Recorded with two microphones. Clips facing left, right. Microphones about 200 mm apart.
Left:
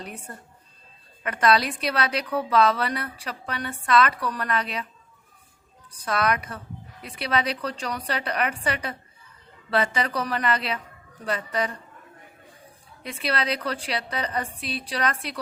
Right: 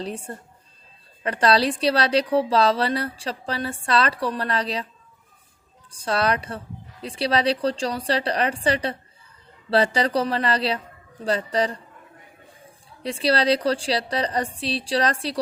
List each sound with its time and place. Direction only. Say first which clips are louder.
0.0 s speech: right 7 dB; 30° right (ahead or behind)
5.9 s speech: right 2 dB; 30° right (ahead or behind)
13.0 s speech: right 6 dB; 30° right (ahead or behind)